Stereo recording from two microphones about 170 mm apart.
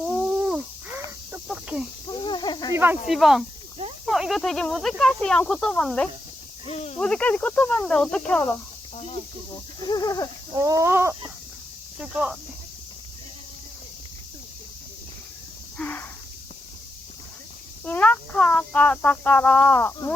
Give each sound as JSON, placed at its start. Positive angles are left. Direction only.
{"t": 0.3, "sound": "a sound", "side_deg": -5}
{"t": 1.5, "sound": "cricket", "side_deg": -10}
{"t": 2.0, "sound": "a sound", "side_deg": 30}
{"t": 2.7, "sound": "speech", "side_deg": -10}
{"t": 3.1, "sound": "speech", "side_deg": 0}
{"t": 6.7, "sound": "speech", "side_deg": 35}
{"t": 7.0, "sound": "speech", "side_deg": 5}
{"t": 9.0, "sound": "cricket", "side_deg": 40}
{"t": 9.8, "sound": "a sound", "side_deg": 25}
{"t": 10.5, "sound": "chicken", "side_deg": -20}
{"t": 11.9, "sound": "speech", "side_deg": -5}
{"t": 15.8, "sound": "a sound", "side_deg": 10}
{"t": 17.8, "sound": "speech", "side_deg": 10}